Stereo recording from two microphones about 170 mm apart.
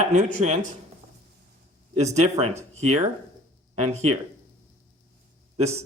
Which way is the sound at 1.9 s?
40° right (ahead or behind).